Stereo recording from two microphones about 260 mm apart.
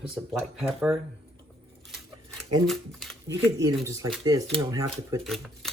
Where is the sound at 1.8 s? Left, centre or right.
Centre.